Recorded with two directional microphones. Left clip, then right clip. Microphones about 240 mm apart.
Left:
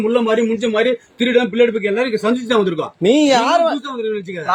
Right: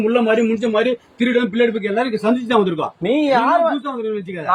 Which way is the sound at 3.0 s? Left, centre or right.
Left.